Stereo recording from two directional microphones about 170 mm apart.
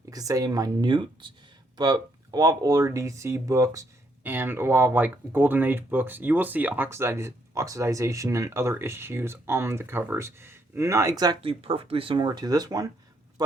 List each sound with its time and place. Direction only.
0.1 s speech: 20° right (ahead or behind)